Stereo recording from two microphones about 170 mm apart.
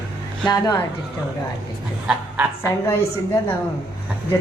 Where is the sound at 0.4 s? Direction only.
25° left (ahead or behind).